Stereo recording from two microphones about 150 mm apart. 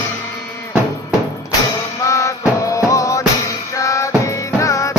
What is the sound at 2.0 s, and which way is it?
Music, 20° left (ahead or behind).